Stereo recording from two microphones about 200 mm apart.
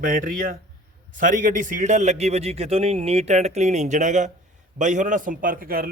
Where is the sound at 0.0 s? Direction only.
45° right (ahead or behind).